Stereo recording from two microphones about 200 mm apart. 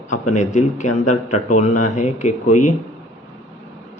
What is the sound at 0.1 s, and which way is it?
Speech, 35° left (ahead or behind).